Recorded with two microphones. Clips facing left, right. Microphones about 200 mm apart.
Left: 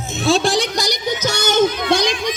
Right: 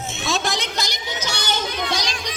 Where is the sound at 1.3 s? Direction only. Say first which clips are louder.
Left 11 dB; 45° left (ahead or behind).